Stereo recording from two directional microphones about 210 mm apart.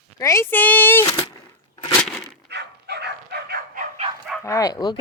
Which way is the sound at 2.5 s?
50° right (ahead or behind).